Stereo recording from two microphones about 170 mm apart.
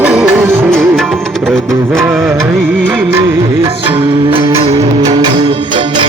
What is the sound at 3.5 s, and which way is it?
Music, 30° right (ahead or behind).